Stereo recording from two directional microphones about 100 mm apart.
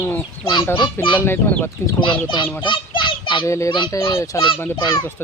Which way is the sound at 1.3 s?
25° left (ahead or behind).